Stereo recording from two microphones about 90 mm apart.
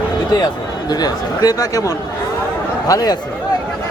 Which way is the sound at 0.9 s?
45° left (ahead or behind).